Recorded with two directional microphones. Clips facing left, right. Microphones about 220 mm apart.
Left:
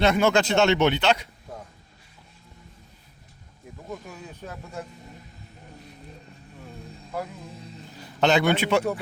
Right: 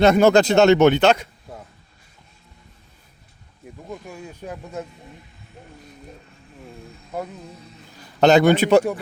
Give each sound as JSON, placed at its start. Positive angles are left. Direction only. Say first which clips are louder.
{"t": 0.0, "sound": "speech", "louder": "right 7 dB", "side_deg": -40}
{"t": 4.1, "sound": "speech", "louder": "right 5 dB", "side_deg": -10}
{"t": 8.2, "sound": "a man's voice", "louder": "right 7 dB", "side_deg": -40}